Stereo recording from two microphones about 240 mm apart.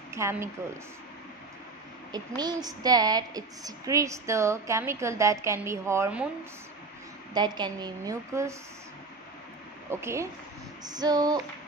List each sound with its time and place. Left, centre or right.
0.1 s a woman's voice: centre
2.1 s a woman's voice: centre
7.3 s a woman's voice: centre
9.8 s a woman's voice: centre